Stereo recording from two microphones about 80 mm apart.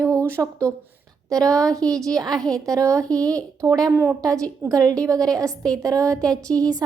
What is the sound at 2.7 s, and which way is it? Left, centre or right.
Speech, right.